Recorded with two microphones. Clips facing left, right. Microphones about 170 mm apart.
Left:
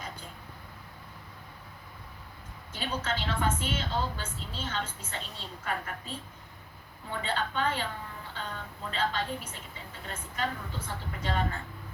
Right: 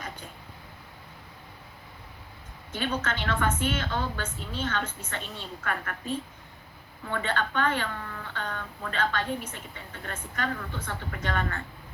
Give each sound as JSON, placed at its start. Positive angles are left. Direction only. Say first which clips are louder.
{"t": 2.7, "sound": "a woman's voice", "louder": "right 3 dB", "side_deg": -60}
{"t": 7.1, "sound": "a woman's voice", "louder": "right 3 dB", "side_deg": -60}